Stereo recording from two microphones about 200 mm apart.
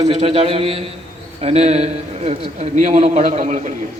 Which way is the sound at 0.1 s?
30° right (ahead or behind).